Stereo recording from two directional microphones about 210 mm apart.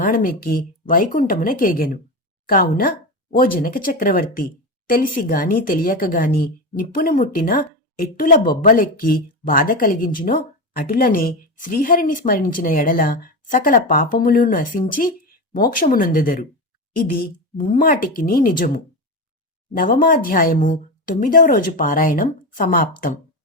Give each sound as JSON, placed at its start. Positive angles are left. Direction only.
{"t": 0.0, "sound": "a woman's voice", "side_deg": 40}
{"t": 19.7, "sound": "speech", "side_deg": 40}